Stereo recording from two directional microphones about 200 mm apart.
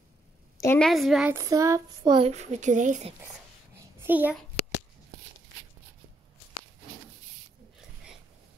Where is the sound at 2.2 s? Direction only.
35° right (ahead or behind).